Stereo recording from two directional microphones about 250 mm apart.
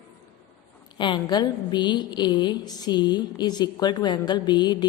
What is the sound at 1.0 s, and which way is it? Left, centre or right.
A woman's voice, centre.